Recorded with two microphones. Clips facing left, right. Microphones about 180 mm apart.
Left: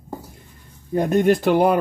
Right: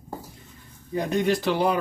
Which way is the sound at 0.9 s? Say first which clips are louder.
Left 6 dB; 50° left (ahead or behind).